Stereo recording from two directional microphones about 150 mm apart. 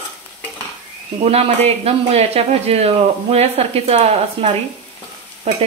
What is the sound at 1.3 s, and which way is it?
Speech, 45° right (ahead or behind).